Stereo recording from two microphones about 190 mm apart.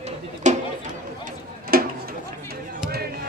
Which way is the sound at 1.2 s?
50° right (ahead or behind).